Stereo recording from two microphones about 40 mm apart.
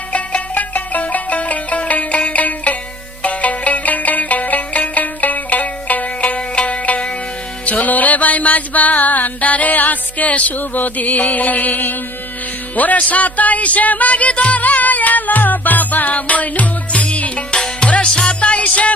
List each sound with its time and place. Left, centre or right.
0.1 s music: left